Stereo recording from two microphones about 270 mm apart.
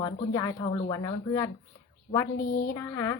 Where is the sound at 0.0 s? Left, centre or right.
Centre.